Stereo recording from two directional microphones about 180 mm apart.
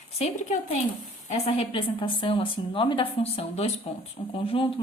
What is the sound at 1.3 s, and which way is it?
A woman's voice, 35° left (ahead or behind).